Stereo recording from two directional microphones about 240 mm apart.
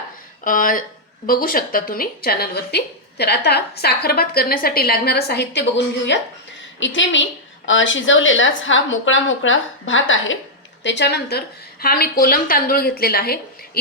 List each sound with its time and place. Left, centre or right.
0.4 s a woman's voice: left